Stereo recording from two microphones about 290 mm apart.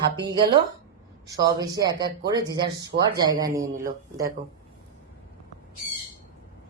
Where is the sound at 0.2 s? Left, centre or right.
Centre.